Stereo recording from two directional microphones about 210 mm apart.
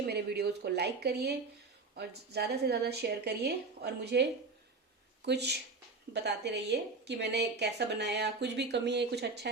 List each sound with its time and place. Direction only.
0.1 s a woman's voice: 50° right (ahead or behind)